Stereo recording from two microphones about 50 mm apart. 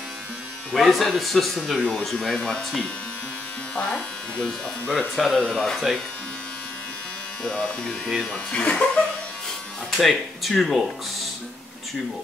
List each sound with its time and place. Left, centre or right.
0.7 s speech: centre
1.8 s speech: centre
2.0 s speech: centre
3.7 s speech: left
4.5 s speech: centre
7.4 s speech: centre
9.9 s speech: centre